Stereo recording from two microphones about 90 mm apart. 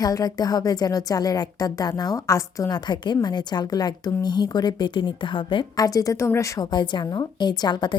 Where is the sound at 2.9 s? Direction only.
55° left (ahead or behind).